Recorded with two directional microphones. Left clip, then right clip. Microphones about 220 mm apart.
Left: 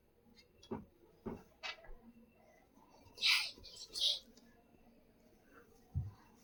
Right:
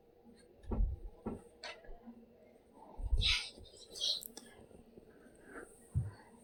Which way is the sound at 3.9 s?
45° left (ahead or behind).